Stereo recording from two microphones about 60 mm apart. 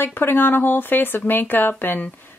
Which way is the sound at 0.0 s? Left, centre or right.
Left.